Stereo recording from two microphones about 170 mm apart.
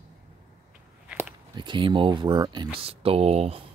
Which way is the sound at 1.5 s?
25° right (ahead or behind).